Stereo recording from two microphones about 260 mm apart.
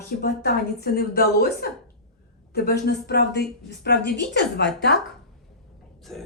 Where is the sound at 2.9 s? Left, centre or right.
Left.